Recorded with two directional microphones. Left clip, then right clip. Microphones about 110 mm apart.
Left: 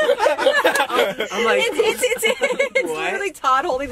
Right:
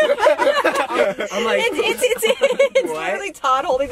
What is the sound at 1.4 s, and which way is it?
Speech, 10° right (ahead or behind).